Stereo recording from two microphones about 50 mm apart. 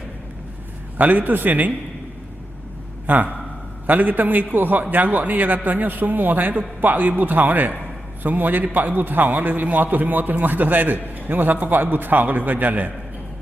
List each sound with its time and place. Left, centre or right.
0.9 s a man's voice: right
3.1 s a man's voice: right